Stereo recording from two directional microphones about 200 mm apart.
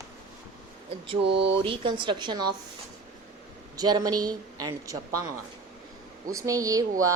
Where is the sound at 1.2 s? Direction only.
60° right (ahead or behind).